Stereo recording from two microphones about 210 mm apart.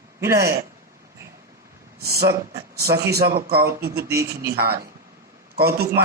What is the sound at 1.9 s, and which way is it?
A man's voice, 50° right (ahead or behind).